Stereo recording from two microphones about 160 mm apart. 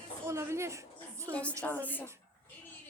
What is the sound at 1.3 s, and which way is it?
Speech, 10° left (ahead or behind).